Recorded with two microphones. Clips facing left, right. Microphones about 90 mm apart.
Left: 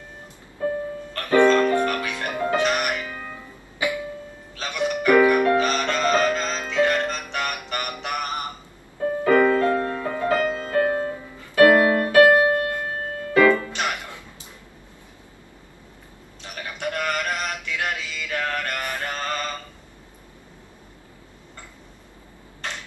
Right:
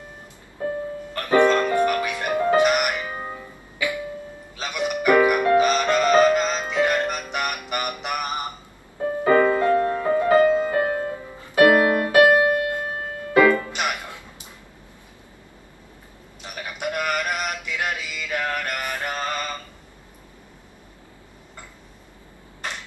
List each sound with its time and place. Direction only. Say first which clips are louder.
1.1 s music: left 1 dB; 15° right (ahead or behind)
3.8 s music: left 1 dB; 20° left (ahead or behind)
4.6 s music: left 1 dB; 15° right (ahead or behind)
16.4 s a sound: right 1 dB; 15° right (ahead or behind)